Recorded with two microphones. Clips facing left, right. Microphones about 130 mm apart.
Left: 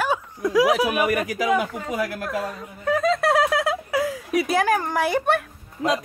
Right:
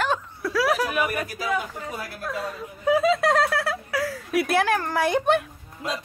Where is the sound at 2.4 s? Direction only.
Centre (ahead or behind).